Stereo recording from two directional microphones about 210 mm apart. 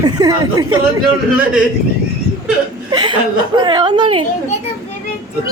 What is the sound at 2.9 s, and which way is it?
Speech, 20° right (ahead or behind).